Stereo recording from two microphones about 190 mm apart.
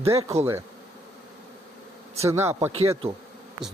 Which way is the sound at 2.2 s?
15° right (ahead or behind).